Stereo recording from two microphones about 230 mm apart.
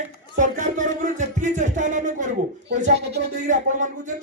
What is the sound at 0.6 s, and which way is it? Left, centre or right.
Speech, right.